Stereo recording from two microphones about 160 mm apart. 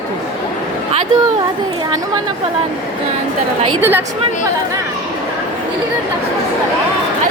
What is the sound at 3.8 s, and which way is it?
Speech, 15° right (ahead or behind).